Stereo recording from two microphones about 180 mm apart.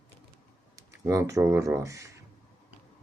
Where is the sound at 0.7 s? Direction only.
15° right (ahead or behind).